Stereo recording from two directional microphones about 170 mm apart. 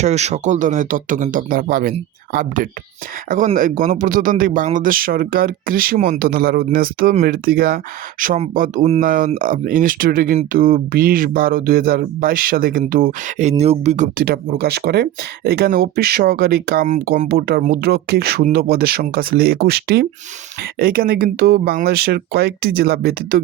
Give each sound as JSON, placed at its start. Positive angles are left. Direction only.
{"t": 0.0, "sound": "speech", "side_deg": -40}